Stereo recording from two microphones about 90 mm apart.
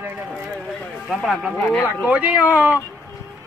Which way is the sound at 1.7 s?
30° left (ahead or behind).